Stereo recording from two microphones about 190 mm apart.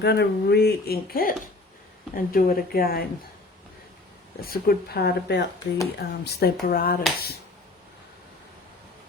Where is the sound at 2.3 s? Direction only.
50° left (ahead or behind).